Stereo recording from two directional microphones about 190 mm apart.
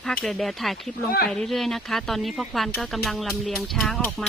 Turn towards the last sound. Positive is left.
turn(degrees=5)  # may be behind; listen again after turning